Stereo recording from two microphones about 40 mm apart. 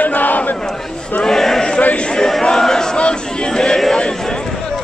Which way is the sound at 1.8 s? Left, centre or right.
Left.